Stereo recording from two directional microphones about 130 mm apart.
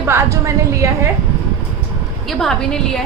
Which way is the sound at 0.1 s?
20° right (ahead or behind).